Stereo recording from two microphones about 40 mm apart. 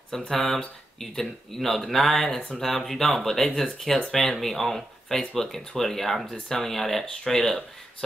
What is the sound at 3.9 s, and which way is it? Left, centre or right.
Speech, left.